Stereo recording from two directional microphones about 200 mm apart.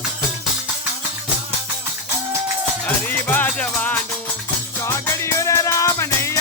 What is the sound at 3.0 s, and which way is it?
Music, 10° left (ahead or behind).